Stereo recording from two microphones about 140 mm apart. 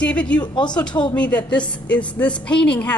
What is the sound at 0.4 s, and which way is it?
Speech, 30° left (ahead or behind).